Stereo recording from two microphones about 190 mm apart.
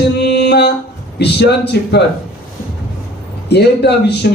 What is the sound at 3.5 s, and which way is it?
Speech, 60° left (ahead or behind).